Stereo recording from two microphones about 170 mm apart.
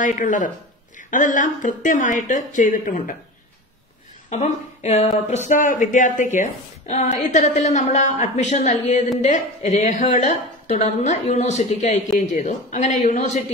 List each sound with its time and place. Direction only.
0.0 s a woman's voice: 50° left (ahead or behind)
4.3 s a woman's voice: 40° left (ahead or behind)